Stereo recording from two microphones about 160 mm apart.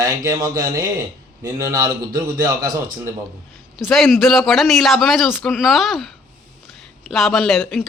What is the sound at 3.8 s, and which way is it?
Speech, centre (ahead or behind).